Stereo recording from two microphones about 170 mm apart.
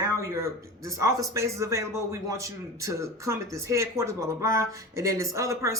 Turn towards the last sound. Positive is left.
turn(degrees=-15)  # may be behind; listen again after turning